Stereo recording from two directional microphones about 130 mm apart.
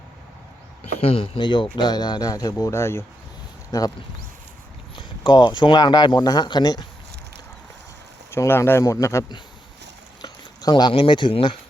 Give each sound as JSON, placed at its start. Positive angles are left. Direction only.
{"t": 1.0, "sound": "speech", "side_deg": 45}
{"t": 4.9, "sound": "speech", "side_deg": 35}
{"t": 8.3, "sound": "speech", "side_deg": 20}